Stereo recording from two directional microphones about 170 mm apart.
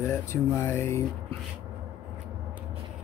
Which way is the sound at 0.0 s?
15° left (ahead or behind).